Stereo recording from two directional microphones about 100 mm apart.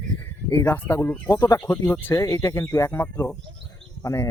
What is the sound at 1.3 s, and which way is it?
Speech, 35° left (ahead or behind).